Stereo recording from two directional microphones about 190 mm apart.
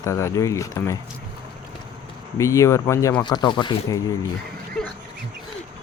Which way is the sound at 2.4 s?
15° left (ahead or behind).